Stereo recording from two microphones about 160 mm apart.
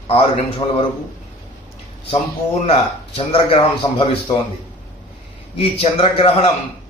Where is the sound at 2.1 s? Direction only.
40° left (ahead or behind).